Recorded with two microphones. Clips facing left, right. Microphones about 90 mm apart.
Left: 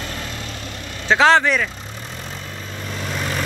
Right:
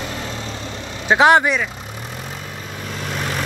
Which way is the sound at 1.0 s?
15° right (ahead or behind).